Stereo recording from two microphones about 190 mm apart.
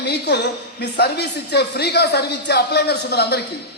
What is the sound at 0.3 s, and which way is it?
Speech, 65° left (ahead or behind).